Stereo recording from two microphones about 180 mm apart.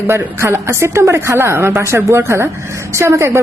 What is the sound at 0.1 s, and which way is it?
A woman's voice, 15° right (ahead or behind).